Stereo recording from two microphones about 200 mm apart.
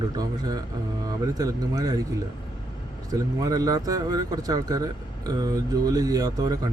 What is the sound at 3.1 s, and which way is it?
Speech, 20° right (ahead or behind).